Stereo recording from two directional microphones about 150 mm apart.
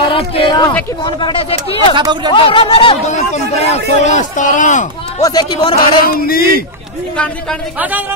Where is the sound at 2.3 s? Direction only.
35° left (ahead or behind).